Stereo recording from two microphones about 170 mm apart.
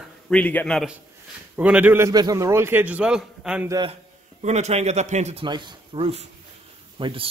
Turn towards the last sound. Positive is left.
turn(degrees=-30)  # may be behind; listen again after turning